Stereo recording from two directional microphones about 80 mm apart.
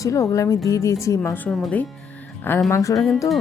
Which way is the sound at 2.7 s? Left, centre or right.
Left.